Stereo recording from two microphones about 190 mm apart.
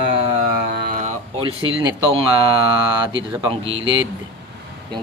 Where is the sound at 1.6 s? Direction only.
20° right (ahead or behind).